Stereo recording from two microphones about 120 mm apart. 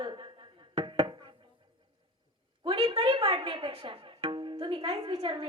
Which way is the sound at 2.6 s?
45° right (ahead or behind).